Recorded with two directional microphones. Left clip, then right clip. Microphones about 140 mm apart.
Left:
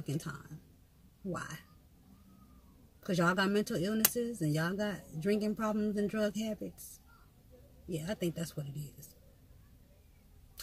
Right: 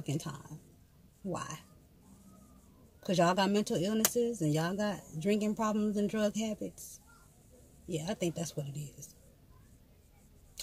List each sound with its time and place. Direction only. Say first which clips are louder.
0.0 s speech: right 1 dB; 25° right (ahead or behind)
3.1 s speech: right 2 dB; 20° right (ahead or behind)
7.9 s speech: right 2 dB; 25° right (ahead or behind)